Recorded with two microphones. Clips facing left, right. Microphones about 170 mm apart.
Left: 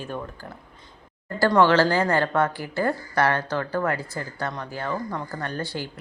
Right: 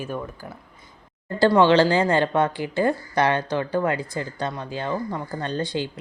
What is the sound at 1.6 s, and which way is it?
A woman's voice, 15° right (ahead or behind).